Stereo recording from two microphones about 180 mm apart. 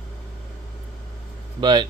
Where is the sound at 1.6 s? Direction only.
25° right (ahead or behind).